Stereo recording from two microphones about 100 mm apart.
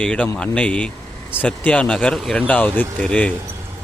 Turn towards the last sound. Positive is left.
turn(degrees=10)  # may be behind; listen again after turning